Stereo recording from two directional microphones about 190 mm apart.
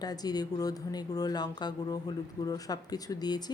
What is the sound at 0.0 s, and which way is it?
A woman's voice, 20° left (ahead or behind).